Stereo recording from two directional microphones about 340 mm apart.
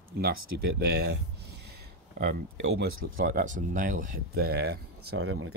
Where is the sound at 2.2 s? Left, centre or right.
Right.